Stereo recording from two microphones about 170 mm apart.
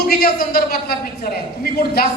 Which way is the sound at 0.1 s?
65° left (ahead or behind).